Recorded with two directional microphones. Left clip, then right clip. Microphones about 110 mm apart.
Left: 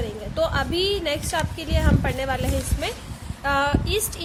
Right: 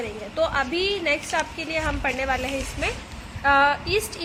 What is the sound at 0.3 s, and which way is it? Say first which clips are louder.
A woman's voice: even; 25° left (ahead or behind).